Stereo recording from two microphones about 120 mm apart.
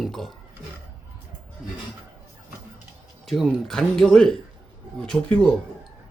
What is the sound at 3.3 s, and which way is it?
Speech, centre (ahead or behind).